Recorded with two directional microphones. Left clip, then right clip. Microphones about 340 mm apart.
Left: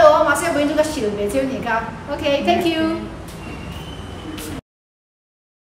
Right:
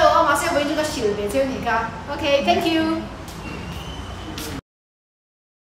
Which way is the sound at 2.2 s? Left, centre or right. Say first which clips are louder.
Left 1 dB; centre.